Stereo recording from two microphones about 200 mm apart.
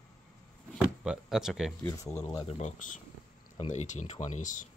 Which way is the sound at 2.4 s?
35° left (ahead or behind).